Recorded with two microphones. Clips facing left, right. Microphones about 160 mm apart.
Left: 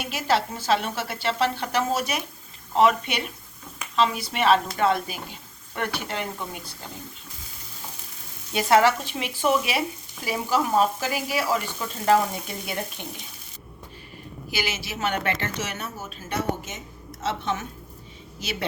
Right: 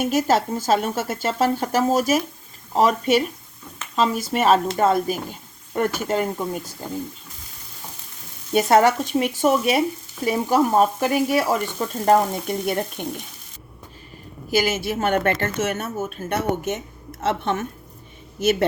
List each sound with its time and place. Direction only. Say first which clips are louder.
0.0 s speech: right 6 dB; 45° right (ahead or behind)
8.5 s speech: right 3 dB; 45° right (ahead or behind)
14.5 s speech: right 10 dB; 50° right (ahead or behind)